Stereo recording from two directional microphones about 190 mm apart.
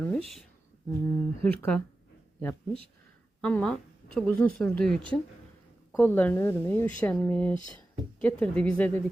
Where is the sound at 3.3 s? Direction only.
5° left (ahead or behind).